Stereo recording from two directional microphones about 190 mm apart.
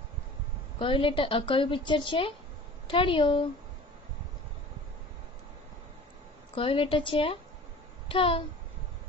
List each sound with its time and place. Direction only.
0.7 s a woman's voice: 25° left (ahead or behind)
6.5 s a woman's voice: 30° left (ahead or behind)